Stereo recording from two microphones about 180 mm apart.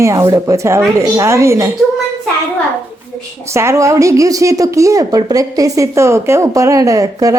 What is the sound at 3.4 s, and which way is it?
A woman's voice, 15° right (ahead or behind).